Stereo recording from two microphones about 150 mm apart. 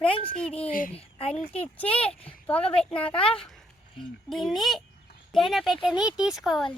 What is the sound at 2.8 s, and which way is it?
Speech, 5° left (ahead or behind).